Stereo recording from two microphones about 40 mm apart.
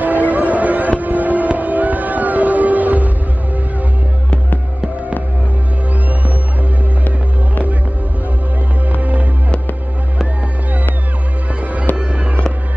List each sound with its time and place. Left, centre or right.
0.0 s music: right
8.8 s music: right
12.0 s fireworks: right